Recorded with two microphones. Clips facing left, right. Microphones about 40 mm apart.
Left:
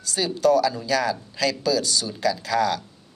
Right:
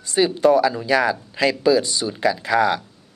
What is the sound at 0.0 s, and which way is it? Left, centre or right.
Speech, right.